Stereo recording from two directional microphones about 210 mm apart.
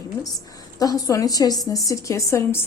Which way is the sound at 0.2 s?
15° left (ahead or behind).